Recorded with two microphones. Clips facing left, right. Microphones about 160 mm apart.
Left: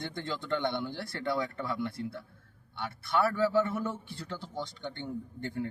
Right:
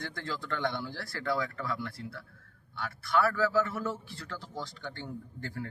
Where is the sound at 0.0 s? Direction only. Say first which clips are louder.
Left 2 dB; 25° left (ahead or behind).